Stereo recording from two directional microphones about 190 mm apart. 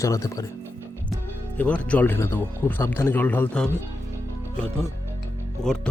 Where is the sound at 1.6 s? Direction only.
5° left (ahead or behind).